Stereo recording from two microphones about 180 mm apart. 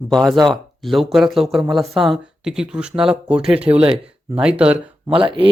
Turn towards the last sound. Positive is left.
turn(degrees=-30)  # may be behind; listen again after turning